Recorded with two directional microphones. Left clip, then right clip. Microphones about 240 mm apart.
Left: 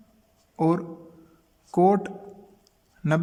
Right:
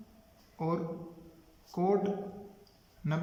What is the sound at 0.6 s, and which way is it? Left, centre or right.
A man's voice, left.